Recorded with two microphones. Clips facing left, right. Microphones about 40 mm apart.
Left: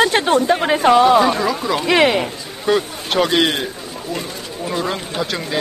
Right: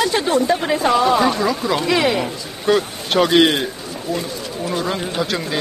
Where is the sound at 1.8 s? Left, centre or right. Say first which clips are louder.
Left 4 dB; left.